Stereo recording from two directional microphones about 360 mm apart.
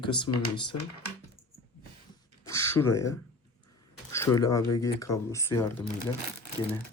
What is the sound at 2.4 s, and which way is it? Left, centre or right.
Speech, centre.